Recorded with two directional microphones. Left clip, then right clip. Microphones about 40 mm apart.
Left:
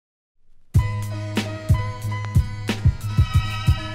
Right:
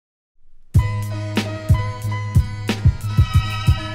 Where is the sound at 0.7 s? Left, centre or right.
Left.